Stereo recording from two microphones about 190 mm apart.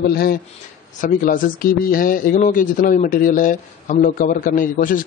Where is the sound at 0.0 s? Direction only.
55° left (ahead or behind).